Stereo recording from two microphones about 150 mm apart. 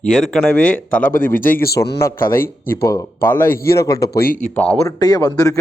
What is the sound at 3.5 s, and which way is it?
Speech, 90° left.